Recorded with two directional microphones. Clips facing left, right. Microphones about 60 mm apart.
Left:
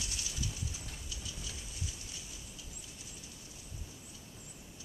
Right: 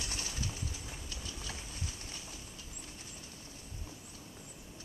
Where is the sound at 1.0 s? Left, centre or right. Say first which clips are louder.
Right 2 dB; right.